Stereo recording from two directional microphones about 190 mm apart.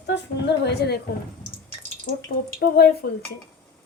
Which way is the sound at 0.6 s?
60° left (ahead or behind).